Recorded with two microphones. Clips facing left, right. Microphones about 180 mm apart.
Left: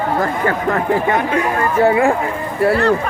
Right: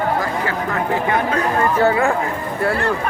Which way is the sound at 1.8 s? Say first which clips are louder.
Left 5 dB; 25° left (ahead or behind).